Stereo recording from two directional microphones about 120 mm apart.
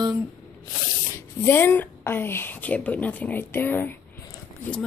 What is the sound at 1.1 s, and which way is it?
A woman's voice, 20° left (ahead or behind).